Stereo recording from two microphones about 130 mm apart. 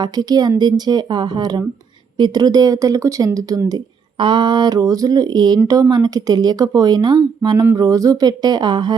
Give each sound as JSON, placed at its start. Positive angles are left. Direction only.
{"t": 0.0, "sound": "speech", "side_deg": -30}